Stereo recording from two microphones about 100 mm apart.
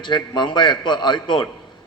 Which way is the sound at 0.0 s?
50° left (ahead or behind).